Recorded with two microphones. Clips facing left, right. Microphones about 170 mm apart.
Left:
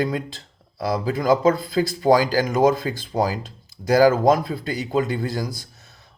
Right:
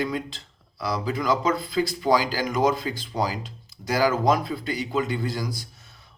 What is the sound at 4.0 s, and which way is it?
Speech, 40° left (ahead or behind).